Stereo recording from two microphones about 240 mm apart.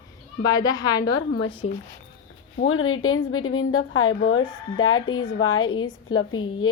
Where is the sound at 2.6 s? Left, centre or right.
Left.